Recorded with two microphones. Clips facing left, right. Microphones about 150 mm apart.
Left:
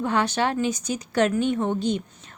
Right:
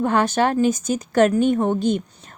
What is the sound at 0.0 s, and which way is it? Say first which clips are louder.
A woman's voice: right 5 dB; 50° right (ahead or behind).